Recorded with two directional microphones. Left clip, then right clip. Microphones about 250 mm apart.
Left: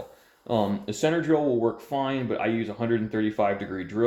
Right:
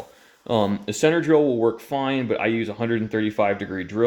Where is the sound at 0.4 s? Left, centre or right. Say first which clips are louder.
Right 4 dB; right.